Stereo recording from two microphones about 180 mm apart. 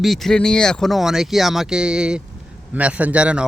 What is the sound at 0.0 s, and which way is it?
Speech, centre (ahead or behind).